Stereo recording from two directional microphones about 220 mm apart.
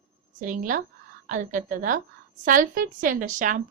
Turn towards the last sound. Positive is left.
turn(degrees=-35)  # may be behind; listen again after turning